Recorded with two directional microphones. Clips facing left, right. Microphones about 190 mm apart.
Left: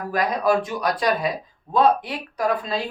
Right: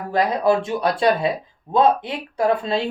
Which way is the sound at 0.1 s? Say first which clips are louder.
Right 3 dB; 25° right (ahead or behind).